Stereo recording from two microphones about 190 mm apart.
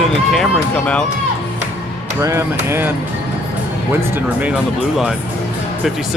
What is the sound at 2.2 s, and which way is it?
Speech, 15° right (ahead or behind).